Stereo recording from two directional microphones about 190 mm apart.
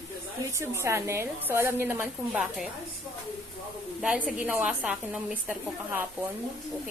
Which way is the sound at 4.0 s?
5° right (ahead or behind).